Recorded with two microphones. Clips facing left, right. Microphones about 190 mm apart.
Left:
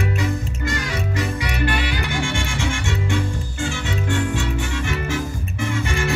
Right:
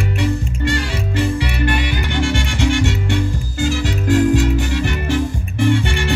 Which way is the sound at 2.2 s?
35° right (ahead or behind).